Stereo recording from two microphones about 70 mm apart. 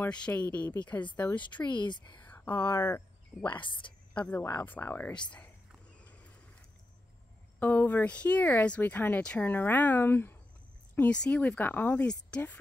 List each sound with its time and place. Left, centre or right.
0.1 s speech: centre
1.4 s speech: left
2.2 s a sound: left
2.5 s speech: left
4.1 s speech: centre
7.5 s speech: left
11.0 s speech: centre